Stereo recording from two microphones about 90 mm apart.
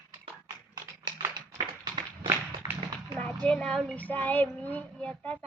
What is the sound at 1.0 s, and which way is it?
Tap, 55° right (ahead or behind).